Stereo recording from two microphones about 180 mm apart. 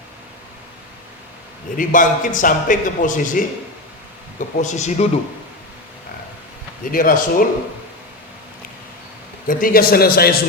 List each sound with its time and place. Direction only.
1.7 s a man's voice: 50° left (ahead or behind)
6.9 s a man's voice: 50° left (ahead or behind)
9.5 s a man's voice: 50° left (ahead or behind)